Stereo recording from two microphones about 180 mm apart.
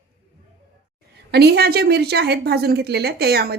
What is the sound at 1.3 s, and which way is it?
Speech, 65° right (ahead or behind).